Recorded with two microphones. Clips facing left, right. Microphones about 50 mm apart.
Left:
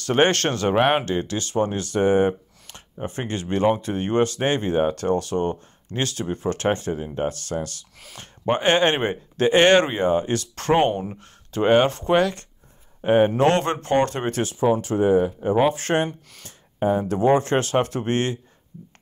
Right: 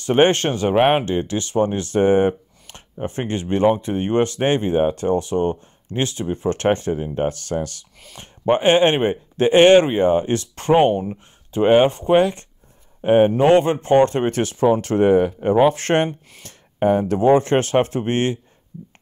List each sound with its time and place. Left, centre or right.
0.0 s speech: right
1.0 s speech: right
10.5 s speech: centre
12.2 s speech: right
13.4 s speech: centre
13.7 s speech: right
16.1 s speech: right
16.4 s a sound: right
17.1 s speech: right